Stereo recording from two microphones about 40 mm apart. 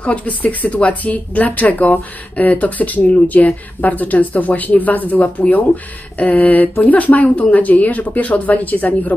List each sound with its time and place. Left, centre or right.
0.0 s speech: left